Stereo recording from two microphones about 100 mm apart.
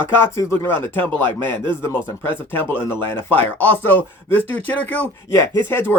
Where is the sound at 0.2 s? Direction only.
25° left (ahead or behind).